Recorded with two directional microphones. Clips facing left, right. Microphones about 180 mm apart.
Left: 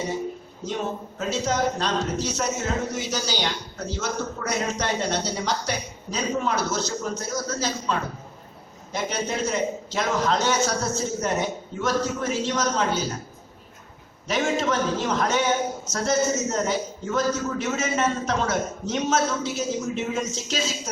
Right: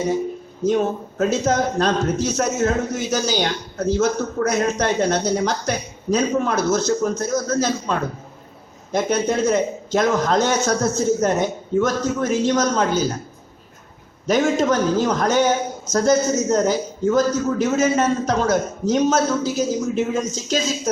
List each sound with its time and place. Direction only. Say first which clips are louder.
1.2 s a man's voice: right 5 dB; 50° right (ahead or behind)
14.3 s a man's voice: right 6 dB; 40° right (ahead or behind)